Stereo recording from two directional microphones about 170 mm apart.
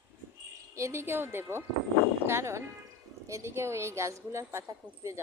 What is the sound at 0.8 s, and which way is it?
A woman's voice, 15° right (ahead or behind).